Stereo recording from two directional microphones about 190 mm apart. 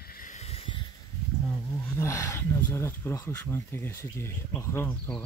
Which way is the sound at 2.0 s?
15° left (ahead or behind).